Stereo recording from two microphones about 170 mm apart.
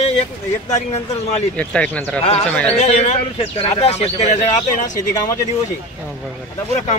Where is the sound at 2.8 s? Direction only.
40° left (ahead or behind).